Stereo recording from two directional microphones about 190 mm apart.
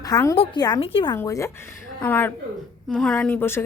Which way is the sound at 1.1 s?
15° left (ahead or behind).